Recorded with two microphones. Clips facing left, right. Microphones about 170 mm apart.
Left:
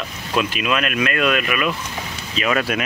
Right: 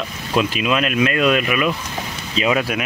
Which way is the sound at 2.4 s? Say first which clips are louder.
Right 1 dB; 10° right (ahead or behind).